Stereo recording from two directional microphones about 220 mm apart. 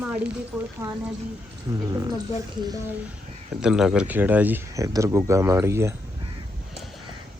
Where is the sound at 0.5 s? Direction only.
Centre (ahead or behind).